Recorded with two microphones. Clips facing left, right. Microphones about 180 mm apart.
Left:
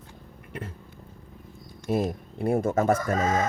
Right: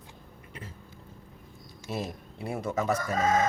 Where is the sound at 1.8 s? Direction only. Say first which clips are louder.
Left 9 dB; 50° left (ahead or behind).